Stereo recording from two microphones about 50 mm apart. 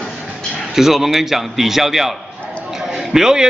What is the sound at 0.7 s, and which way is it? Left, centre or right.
A man's voice, centre.